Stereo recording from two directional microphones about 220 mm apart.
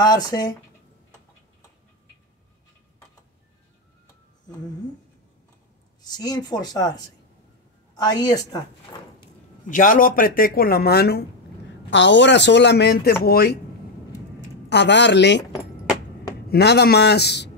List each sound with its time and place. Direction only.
0.0 s speech: 20° left (ahead or behind)
6.0 s speech: 20° left (ahead or behind)
9.7 s speech: 35° left (ahead or behind)
14.7 s speech: 50° left (ahead or behind)
16.4 s speech: 50° left (ahead or behind)